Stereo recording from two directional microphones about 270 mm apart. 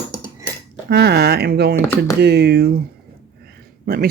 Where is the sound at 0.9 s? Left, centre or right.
Right.